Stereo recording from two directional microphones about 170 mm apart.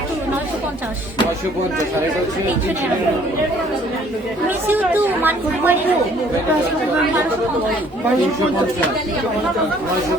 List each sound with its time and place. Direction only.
4.7 s speech: 10° right (ahead or behind)